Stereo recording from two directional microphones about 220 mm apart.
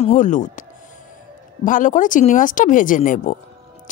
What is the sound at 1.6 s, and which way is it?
Speech, 35° left (ahead or behind).